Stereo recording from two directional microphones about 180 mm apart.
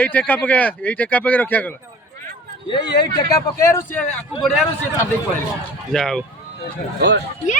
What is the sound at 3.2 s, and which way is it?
Speech, 20° left (ahead or behind).